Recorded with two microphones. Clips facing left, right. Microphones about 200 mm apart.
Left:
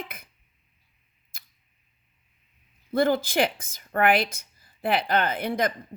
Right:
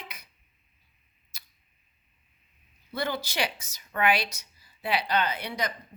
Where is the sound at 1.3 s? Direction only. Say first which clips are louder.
Even; 50° left (ahead or behind).